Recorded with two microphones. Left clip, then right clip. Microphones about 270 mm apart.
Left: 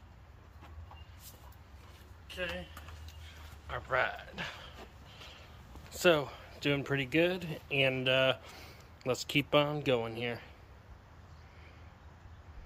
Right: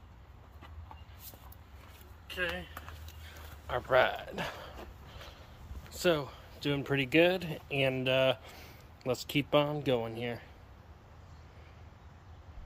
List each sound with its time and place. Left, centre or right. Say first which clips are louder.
2.2 s speech: right 3 dB; centre
3.6 s speech: right 5 dB; right
5.9 s speech: left 3 dB; centre